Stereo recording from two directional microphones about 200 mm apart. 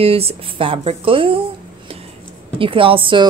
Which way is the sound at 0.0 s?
30° right (ahead or behind).